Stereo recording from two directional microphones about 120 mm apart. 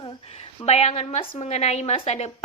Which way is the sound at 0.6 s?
60° left (ahead or behind).